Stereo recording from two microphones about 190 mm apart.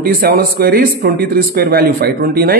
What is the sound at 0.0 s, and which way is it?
A man's voice, 50° right (ahead or behind).